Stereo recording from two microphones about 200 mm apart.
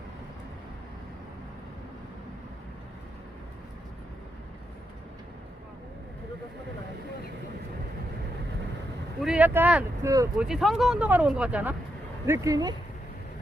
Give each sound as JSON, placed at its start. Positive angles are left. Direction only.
{"t": 9.2, "sound": "speech", "side_deg": -5}
{"t": 10.3, "sound": "speech", "side_deg": -5}